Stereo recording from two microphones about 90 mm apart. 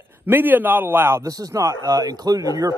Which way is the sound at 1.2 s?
40° right (ahead or behind).